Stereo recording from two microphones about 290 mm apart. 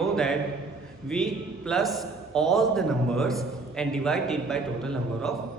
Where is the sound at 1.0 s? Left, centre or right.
Centre.